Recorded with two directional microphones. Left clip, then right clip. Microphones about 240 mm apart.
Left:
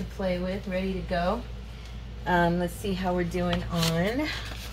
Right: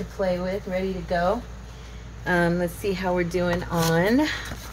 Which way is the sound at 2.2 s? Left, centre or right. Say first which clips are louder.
Right 2 dB; centre.